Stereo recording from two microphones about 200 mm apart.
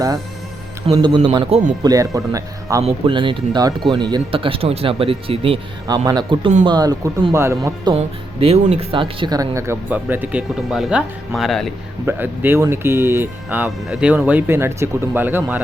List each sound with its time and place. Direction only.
0.9 s speech: 20° right (ahead or behind)
1.9 s speech: 15° right (ahead or behind)
7.9 s speech: 30° right (ahead or behind); by 11.7 s centre (ahead or behind)
12.0 s speech: 10° right (ahead or behind)